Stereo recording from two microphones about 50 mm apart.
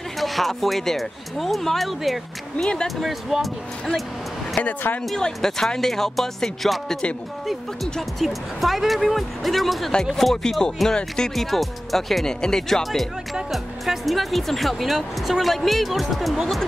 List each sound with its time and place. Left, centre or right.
0.2 s speech: centre
2.6 s speech: centre
3.0 s speech: centre
4.6 s speech: left
5.1 s speech: centre
8.2 s speech: centre
11.3 s speech: centre